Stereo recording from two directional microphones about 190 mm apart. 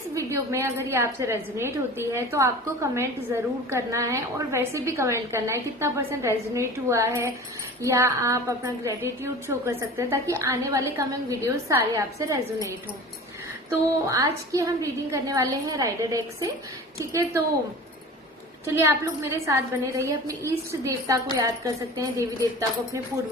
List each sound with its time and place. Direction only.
0.1 s a woman's voice: 15° right (ahead or behind)
18.6 s a woman's voice: 15° right (ahead or behind)